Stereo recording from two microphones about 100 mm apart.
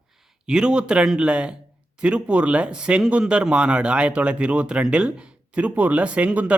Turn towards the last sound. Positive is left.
turn(degrees=-15)  # may be behind; listen again after turning